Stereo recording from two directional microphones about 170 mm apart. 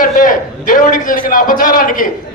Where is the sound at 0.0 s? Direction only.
55° left (ahead or behind).